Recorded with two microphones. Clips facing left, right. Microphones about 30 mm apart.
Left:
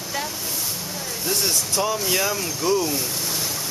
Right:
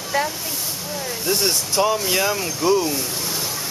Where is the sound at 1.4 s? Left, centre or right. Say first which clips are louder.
Right 4 dB; right.